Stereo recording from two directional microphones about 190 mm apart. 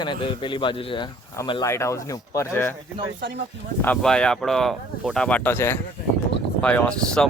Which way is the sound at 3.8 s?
5° left (ahead or behind).